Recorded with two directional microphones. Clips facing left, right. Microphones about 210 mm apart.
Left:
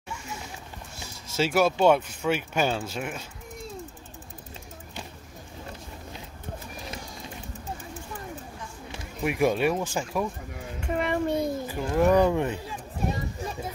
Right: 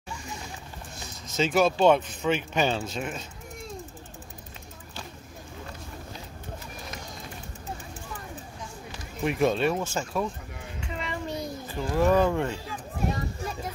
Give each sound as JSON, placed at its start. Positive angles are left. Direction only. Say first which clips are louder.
{"t": 0.9, "sound": "speech", "louder": "even", "side_deg": 10}
{"t": 9.2, "sound": "speech", "louder": "even", "side_deg": 10}
{"t": 10.8, "sound": "a sound", "louder": "left 8 dB", "side_deg": 55}
{"t": 11.6, "sound": "speech", "louder": "right 1 dB", "side_deg": 15}